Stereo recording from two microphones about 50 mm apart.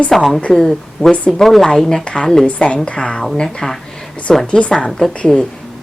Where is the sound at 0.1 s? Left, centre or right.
Centre.